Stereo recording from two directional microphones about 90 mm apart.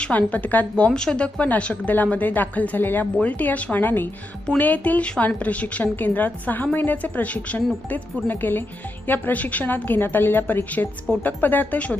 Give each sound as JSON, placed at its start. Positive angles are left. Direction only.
{"t": 0.0, "sound": "a woman's voice", "side_deg": 15}